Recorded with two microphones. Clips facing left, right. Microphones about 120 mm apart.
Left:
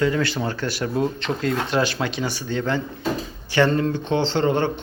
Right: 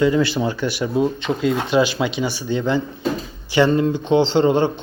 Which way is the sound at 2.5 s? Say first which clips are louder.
Right 4 dB; 10° right (ahead or behind).